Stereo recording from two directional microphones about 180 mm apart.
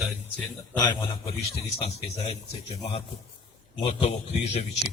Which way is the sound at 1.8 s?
35° left (ahead or behind).